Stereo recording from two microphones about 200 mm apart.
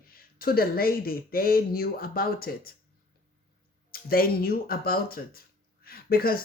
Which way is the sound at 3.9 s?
50° left (ahead or behind).